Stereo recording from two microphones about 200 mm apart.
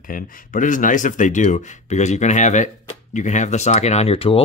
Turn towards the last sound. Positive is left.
turn(degrees=25)  # may be behind; listen again after turning